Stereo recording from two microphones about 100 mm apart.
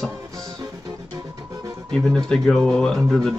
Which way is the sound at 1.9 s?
5° left (ahead or behind).